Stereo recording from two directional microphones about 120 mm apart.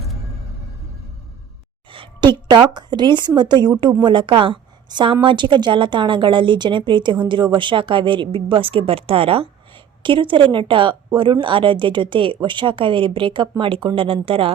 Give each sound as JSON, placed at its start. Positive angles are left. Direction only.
{"t": 1.9, "sound": "a woman's voice", "side_deg": -45}